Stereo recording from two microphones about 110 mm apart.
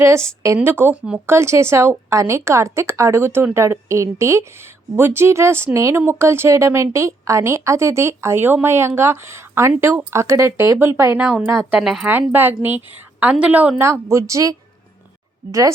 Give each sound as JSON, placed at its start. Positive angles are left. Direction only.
{"t": 0.0, "sound": "speech", "side_deg": -25}
{"t": 11.1, "sound": "a woman's voice", "side_deg": -10}
{"t": 11.8, "sound": "speech", "side_deg": -5}
{"t": 12.0, "sound": "a woman's voice", "side_deg": -15}
{"t": 13.8, "sound": "speech", "side_deg": -25}